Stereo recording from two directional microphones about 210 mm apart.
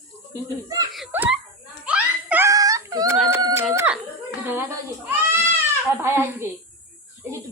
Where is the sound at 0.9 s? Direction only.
5° right (ahead or behind).